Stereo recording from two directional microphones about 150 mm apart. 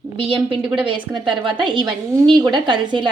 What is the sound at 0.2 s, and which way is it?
A woman's voice, 35° right (ahead or behind).